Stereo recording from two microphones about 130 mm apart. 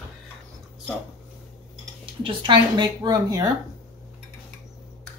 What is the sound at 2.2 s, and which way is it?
Speech, 35° right (ahead or behind).